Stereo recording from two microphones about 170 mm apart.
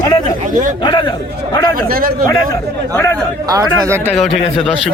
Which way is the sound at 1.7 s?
60° right (ahead or behind).